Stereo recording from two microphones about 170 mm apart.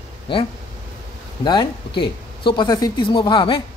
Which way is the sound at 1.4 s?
25° left (ahead or behind).